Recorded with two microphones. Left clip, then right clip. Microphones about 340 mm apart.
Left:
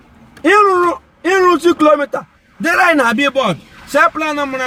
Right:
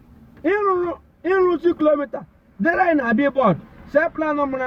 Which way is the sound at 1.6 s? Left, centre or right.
Centre.